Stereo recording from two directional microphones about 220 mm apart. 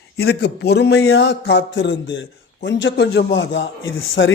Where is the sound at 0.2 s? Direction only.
50° left (ahead or behind).